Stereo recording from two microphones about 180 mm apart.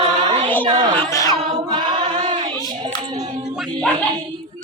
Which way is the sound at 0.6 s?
25° right (ahead or behind).